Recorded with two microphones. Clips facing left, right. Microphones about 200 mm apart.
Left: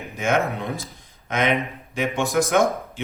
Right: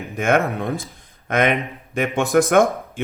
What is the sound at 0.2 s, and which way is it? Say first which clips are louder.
A man's voice: right 3 dB; 55° right (ahead or behind).